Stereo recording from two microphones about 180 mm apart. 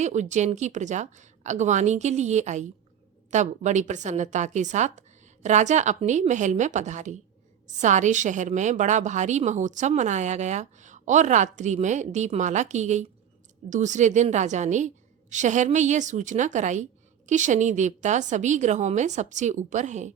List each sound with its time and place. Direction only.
0.0 s a woman's voice: 40° right (ahead or behind)